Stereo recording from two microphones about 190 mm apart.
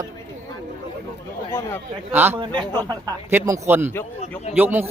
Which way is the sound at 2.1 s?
10° right (ahead or behind).